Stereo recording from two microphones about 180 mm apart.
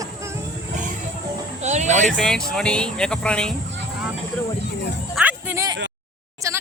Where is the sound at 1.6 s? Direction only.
40° right (ahead or behind).